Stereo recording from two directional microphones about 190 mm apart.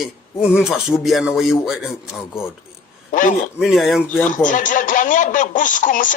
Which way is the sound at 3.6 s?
Centre (ahead or behind).